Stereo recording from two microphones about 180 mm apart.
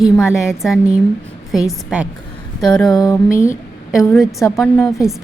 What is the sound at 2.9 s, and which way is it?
Speech, 20° left (ahead or behind).